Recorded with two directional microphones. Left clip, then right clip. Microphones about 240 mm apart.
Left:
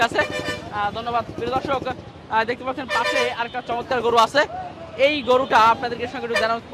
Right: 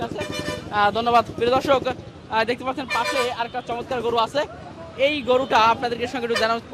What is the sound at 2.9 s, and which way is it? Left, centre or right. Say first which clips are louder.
Speech: left 2 dB; centre.